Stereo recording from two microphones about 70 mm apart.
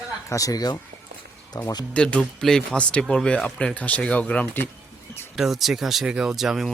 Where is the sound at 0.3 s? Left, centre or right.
Left.